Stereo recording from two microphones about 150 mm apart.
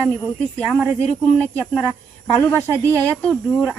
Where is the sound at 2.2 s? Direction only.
15° left (ahead or behind).